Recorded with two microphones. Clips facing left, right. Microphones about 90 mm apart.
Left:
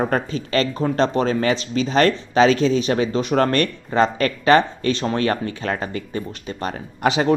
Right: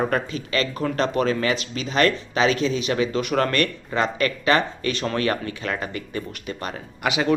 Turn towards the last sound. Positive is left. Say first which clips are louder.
# left 4 dB
turn(degrees=35)  # may be behind; listen again after turning